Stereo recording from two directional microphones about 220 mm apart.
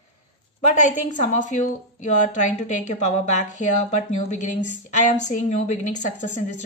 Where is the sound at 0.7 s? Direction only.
35° left (ahead or behind).